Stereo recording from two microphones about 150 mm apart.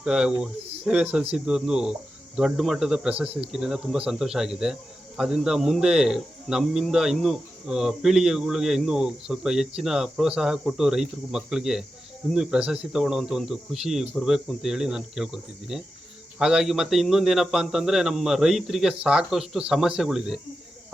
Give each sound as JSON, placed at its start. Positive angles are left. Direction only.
{"t": 0.0, "sound": "speech", "side_deg": -5}